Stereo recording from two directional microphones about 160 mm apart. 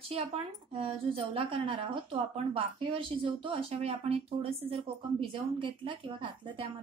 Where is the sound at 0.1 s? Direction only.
35° right (ahead or behind).